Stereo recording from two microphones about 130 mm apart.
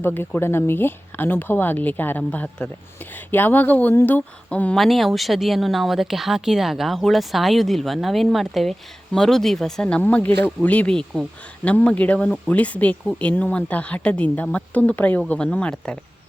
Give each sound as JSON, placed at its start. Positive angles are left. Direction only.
{"t": 0.0, "sound": "speech", "side_deg": 15}